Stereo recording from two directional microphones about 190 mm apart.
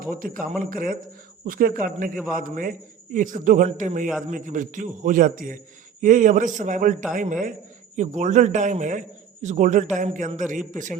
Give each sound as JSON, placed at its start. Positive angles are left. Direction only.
{"t": 0.1, "sound": "a man's voice", "side_deg": -45}